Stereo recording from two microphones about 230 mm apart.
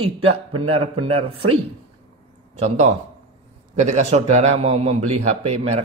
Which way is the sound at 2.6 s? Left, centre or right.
Right.